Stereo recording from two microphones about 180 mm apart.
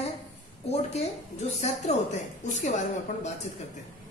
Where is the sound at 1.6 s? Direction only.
40° left (ahead or behind).